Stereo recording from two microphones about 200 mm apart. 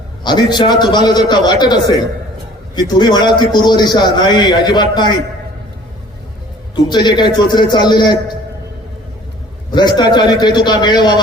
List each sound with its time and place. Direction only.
0.3 s a man's voice: 20° left (ahead or behind)
6.9 s a man's voice: 20° left (ahead or behind)
9.7 s a man's voice: 20° left (ahead or behind)